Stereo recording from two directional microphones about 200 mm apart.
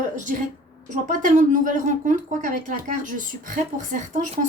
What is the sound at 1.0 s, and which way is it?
Speech, 40° right (ahead or behind).